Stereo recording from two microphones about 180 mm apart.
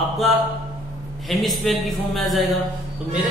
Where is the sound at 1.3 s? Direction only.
Centre (ahead or behind).